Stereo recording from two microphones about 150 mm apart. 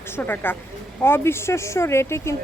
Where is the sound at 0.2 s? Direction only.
15° left (ahead or behind).